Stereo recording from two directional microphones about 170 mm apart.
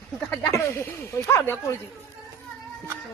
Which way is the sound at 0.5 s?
15° left (ahead or behind).